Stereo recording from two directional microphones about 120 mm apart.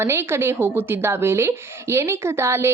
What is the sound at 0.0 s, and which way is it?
A woman's voice, 20° right (ahead or behind).